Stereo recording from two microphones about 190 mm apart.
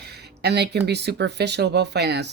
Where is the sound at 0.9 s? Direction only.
60° right (ahead or behind).